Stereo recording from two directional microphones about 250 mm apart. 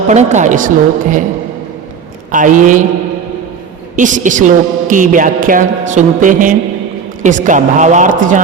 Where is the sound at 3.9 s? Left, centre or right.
Right.